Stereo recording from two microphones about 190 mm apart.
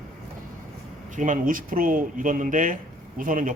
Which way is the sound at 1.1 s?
45° right (ahead or behind).